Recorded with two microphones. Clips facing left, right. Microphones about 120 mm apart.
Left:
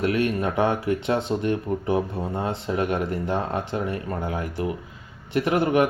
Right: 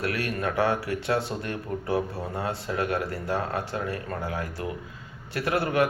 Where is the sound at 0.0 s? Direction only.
20° left (ahead or behind).